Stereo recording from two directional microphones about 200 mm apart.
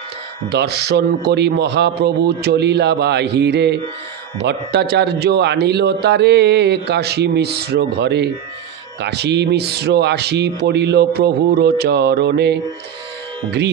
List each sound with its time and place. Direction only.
0.5 s a man's voice: 55° right (ahead or behind)